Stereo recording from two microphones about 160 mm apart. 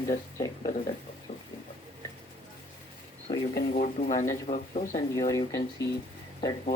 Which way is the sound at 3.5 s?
60° left (ahead or behind).